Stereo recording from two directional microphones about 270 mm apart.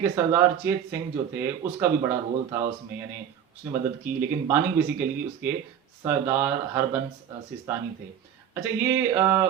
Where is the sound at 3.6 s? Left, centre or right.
Centre.